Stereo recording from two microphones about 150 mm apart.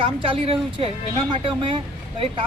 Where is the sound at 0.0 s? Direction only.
35° right (ahead or behind).